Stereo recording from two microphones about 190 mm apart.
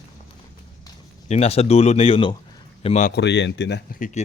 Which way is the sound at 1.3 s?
35° left (ahead or behind).